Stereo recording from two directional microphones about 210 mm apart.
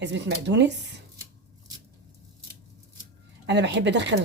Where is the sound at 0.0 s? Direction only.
55° right (ahead or behind).